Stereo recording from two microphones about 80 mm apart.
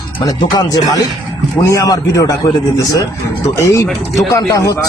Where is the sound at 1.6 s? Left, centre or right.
Left.